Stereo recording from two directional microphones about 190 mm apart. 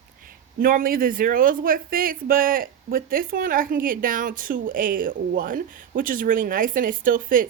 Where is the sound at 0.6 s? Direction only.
50° right (ahead or behind).